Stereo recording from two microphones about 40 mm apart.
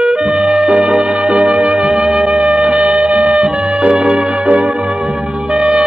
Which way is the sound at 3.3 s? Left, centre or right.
Centre.